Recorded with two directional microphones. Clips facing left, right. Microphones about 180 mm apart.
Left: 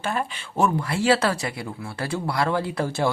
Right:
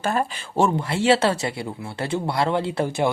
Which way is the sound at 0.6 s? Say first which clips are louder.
Right 1 dB; 25° right (ahead or behind).